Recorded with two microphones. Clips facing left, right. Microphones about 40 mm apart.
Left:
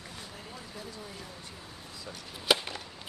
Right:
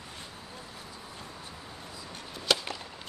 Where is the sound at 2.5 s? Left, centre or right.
Centre.